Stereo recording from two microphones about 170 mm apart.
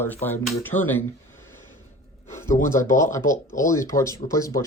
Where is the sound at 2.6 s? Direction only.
15° left (ahead or behind).